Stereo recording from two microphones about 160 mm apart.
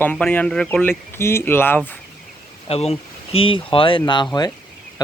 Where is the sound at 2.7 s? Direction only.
40° left (ahead or behind).